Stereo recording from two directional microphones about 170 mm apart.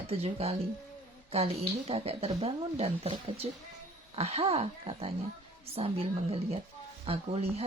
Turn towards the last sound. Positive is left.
turn(degrees=-35)  # may be behind; listen again after turning